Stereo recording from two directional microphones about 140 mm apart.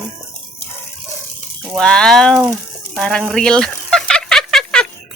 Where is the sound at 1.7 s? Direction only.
5° left (ahead or behind).